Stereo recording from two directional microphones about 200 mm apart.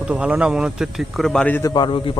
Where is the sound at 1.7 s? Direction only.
25° left (ahead or behind).